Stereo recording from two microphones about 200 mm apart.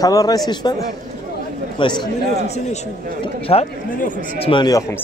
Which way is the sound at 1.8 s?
20° left (ahead or behind).